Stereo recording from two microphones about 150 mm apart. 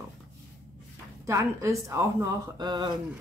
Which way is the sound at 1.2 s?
20° right (ahead or behind).